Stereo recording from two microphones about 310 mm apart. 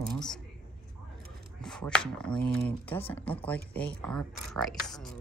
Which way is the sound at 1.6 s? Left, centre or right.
Centre.